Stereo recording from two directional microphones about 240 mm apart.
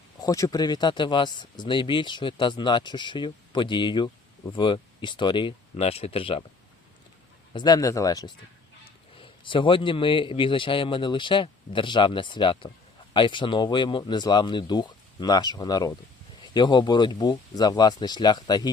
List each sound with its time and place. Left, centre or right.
0.2 s speech: centre
7.5 s speech: centre